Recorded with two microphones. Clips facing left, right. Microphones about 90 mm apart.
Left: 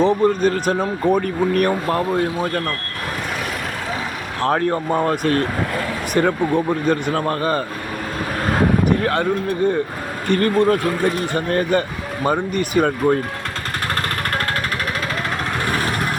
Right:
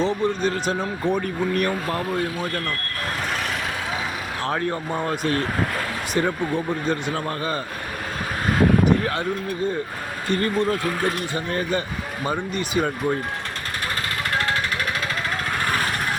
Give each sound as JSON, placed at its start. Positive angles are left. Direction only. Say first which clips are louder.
{"t": 0.0, "sound": "speech", "louder": "left 6 dB", "side_deg": 50}
{"t": 2.1, "sound": "speech", "louder": "left 5 dB", "side_deg": 30}
{"t": 4.4, "sound": "speech", "louder": "left 7 dB", "side_deg": 50}
{"t": 10.2, "sound": "speech", "louder": "left 6 dB", "side_deg": 60}